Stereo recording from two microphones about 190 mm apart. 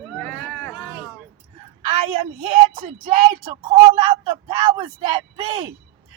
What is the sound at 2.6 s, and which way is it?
Speech, 30° right (ahead or behind).